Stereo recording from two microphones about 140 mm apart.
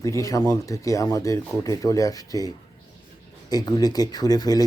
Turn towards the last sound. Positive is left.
turn(degrees=25)  # may be behind; listen again after turning